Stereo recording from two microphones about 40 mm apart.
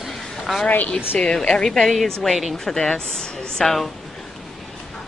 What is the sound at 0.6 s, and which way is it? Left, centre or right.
Speech, left.